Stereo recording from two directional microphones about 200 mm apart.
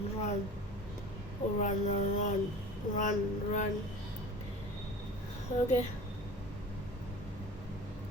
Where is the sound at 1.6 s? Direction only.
35° left (ahead or behind).